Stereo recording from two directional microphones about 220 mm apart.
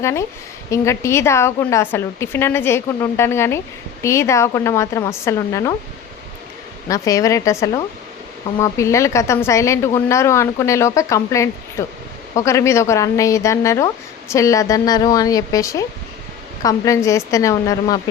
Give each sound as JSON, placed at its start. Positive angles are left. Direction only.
{"t": 0.0, "sound": "speech", "side_deg": 10}
{"t": 6.8, "sound": "speech", "side_deg": 15}